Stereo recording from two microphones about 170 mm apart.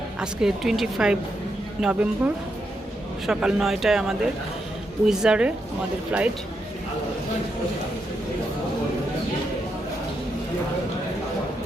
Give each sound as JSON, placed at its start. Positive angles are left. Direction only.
{"t": 0.2, "sound": "speech", "side_deg": -5}